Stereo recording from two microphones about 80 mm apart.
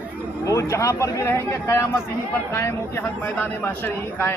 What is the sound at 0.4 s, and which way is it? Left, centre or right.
A man's voice, left.